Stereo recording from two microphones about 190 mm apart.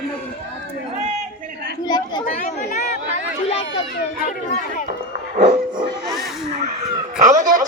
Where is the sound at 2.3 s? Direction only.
45° left (ahead or behind).